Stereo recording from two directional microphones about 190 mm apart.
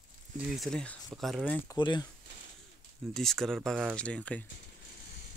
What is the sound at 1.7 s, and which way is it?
Speech, 20° left (ahead or behind).